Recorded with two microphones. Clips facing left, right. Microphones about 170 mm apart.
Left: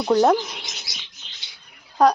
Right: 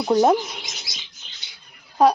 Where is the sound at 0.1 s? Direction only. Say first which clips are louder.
Even; 15° right (ahead or behind).